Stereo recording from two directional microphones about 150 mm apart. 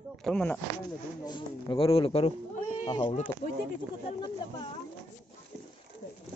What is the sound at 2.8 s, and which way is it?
Speech, 30° left (ahead or behind).